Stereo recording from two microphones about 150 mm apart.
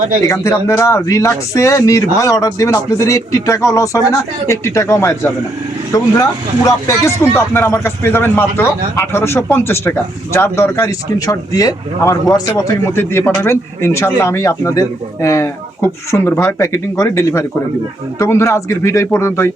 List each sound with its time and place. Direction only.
0.2 s speech: 20° left (ahead or behind)
6.7 s speech: 15° left (ahead or behind)